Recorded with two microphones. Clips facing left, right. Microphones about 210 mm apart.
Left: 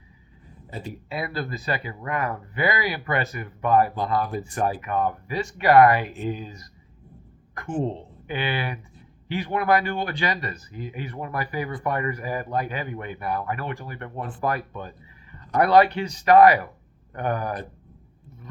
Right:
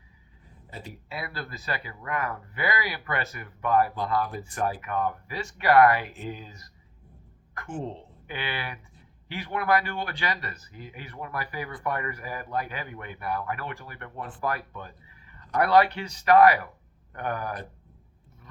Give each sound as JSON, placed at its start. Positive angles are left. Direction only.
{"t": 0.7, "sound": "a woman's voice", "side_deg": 20}